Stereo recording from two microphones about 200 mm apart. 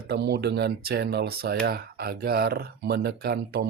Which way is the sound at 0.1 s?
55° right (ahead or behind).